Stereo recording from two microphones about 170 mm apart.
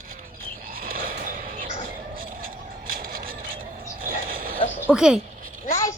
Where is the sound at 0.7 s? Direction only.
55° right (ahead or behind).